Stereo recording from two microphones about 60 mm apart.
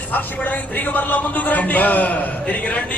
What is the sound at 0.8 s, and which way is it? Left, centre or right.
A man's voice, left.